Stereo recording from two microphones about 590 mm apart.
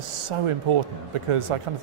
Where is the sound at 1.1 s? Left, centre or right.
Right.